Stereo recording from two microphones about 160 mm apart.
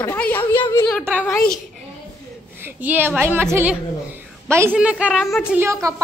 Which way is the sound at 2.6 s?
10° right (ahead or behind).